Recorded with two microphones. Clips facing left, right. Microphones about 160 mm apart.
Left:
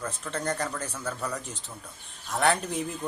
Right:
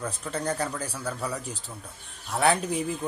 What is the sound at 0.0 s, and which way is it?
A man's voice, 10° right (ahead or behind).